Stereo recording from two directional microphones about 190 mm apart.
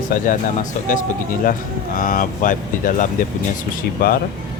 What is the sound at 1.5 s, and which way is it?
Speech, 45° left (ahead or behind).